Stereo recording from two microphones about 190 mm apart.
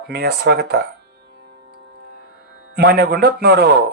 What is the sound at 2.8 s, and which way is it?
Speech, 55° right (ahead or behind).